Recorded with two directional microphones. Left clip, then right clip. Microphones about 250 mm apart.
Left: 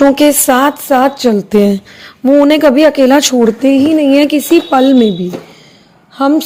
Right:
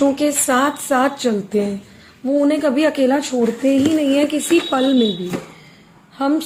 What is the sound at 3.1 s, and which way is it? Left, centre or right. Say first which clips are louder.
A woman's voice: left 10 dB; left.